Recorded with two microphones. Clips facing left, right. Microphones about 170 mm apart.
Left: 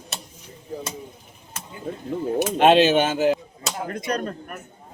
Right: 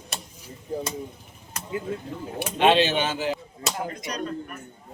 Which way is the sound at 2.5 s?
50° left (ahead or behind).